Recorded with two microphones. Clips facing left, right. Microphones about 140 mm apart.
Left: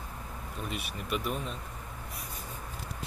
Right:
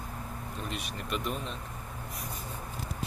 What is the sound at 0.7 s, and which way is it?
Speech, 5° left (ahead or behind).